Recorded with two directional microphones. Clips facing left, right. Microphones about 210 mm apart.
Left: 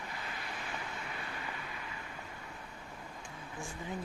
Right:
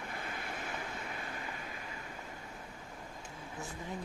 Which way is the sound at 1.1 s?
45° right (ahead or behind).